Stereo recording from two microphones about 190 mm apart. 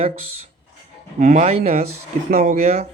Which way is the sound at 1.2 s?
40° right (ahead or behind).